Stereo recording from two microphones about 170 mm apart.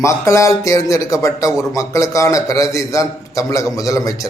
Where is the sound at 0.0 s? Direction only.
15° left (ahead or behind).